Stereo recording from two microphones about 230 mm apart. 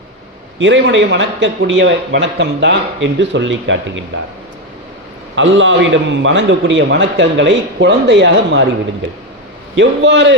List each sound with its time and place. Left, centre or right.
0.6 s a man's voice: right
5.3 s a man's voice: right
9.7 s a man's voice: right